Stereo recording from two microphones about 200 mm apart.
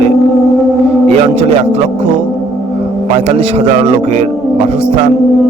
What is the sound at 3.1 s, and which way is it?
A man's voice, 30° right (ahead or behind).